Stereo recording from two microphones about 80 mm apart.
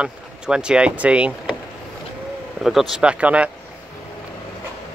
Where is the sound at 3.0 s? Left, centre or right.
Centre.